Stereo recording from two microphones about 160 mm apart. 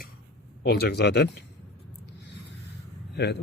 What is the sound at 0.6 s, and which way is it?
Speech, 85° left.